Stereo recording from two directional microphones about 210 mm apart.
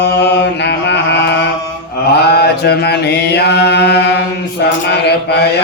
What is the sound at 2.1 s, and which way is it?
Mantra, 50° left (ahead or behind).